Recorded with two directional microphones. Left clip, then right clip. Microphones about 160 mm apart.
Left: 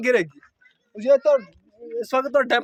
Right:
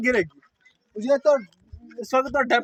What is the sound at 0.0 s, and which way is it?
Speech, 45° left (ahead or behind).